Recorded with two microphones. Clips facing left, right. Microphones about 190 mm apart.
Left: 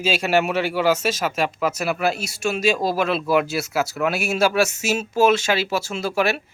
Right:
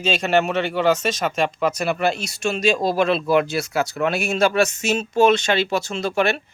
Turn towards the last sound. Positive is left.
turn(degrees=5)  # may be behind; listen again after turning